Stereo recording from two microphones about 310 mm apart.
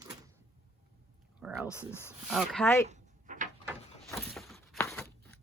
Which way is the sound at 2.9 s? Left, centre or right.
Right.